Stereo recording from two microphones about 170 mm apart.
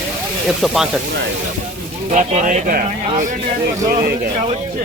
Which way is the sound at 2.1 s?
45° right (ahead or behind).